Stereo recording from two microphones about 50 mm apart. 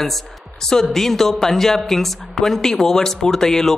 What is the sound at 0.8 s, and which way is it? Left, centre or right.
A woman's voice, centre.